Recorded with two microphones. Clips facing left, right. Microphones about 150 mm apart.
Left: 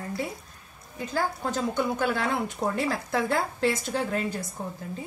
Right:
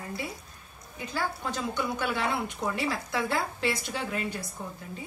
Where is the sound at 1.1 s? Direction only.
45° left (ahead or behind).